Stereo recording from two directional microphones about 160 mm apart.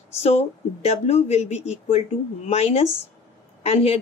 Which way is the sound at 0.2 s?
40° left (ahead or behind).